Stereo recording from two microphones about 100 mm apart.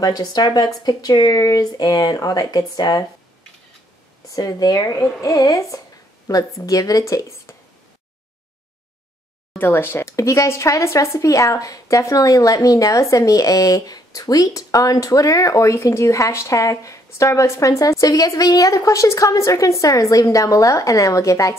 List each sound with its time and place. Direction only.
0.0 s speech: 40° left (ahead or behind)
4.4 s speech: 40° left (ahead or behind)
9.6 s speech: 20° left (ahead or behind)